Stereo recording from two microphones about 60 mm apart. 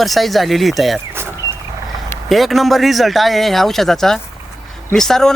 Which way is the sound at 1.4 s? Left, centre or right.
Right.